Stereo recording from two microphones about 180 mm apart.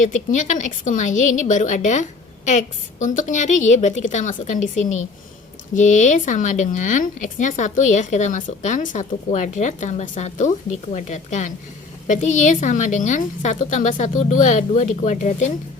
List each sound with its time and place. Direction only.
0.0 s a woman's voice: 45° left (ahead or behind)